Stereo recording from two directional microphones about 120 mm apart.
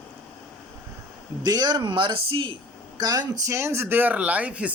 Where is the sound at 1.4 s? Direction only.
35° right (ahead or behind).